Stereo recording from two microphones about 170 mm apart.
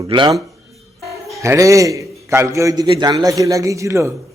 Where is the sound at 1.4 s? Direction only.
20° right (ahead or behind).